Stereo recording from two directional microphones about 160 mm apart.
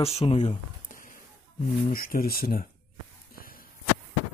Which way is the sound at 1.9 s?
65° left (ahead or behind).